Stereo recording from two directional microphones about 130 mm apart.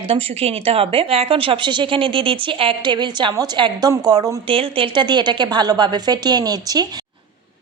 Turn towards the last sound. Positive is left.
turn(degrees=-30)  # may be behind; listen again after turning